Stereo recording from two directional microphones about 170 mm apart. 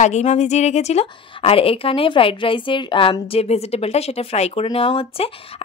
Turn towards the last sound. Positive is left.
turn(degrees=35)  # may be behind; listen again after turning